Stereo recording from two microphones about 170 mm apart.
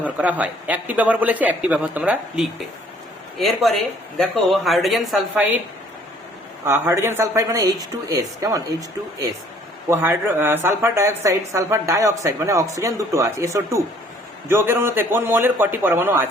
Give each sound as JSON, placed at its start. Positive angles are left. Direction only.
{"t": 0.0, "sound": "a woman's voice", "side_deg": -10}
{"t": 6.7, "sound": "a woman's voice", "side_deg": -15}
{"t": 9.9, "sound": "a woman's voice", "side_deg": -15}